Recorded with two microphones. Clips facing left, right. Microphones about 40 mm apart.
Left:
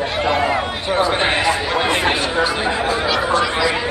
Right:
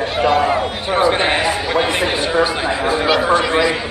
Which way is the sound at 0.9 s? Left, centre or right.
Centre.